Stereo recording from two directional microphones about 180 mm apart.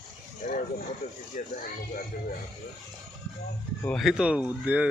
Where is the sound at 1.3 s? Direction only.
40° left (ahead or behind).